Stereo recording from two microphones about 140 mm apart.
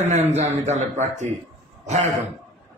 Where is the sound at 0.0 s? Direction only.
55° right (ahead or behind).